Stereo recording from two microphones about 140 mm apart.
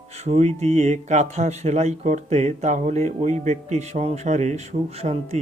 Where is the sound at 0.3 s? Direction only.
50° right (ahead or behind).